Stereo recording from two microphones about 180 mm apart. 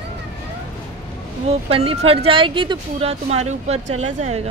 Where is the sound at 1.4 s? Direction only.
35° right (ahead or behind).